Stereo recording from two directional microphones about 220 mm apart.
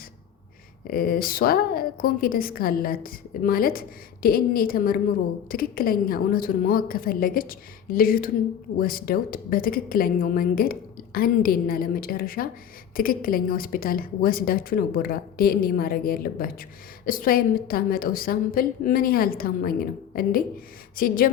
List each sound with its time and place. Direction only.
0.9 s a woman's voice: 40° left (ahead or behind)